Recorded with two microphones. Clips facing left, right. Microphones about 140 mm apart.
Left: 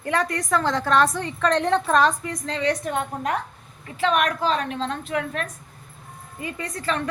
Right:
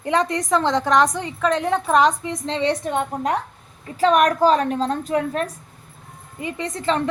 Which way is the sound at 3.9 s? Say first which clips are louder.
Right 5 dB; 40° right (ahead or behind).